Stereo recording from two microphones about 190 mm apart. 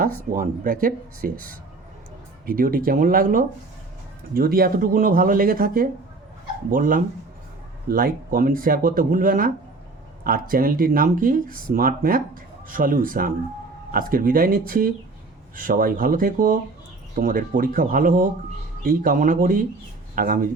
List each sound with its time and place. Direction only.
0.3 s speech: 45° right (ahead or behind)